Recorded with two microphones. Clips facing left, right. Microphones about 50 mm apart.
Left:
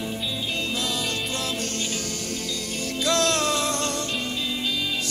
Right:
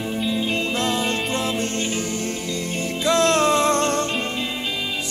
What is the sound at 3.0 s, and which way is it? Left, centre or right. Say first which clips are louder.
Music: right 5 dB; right.